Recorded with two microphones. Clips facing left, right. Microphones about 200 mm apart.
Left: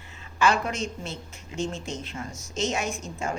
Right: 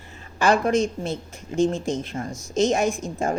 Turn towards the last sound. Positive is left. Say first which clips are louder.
# right 7 dB
turn(degrees=-55)  # may be behind; listen again after turning